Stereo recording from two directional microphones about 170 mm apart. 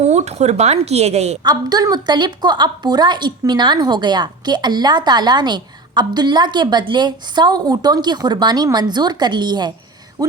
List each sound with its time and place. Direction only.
0.0 s a woman's voice: 40° right (ahead or behind)
1.5 s a woman's voice: 20° right (ahead or behind)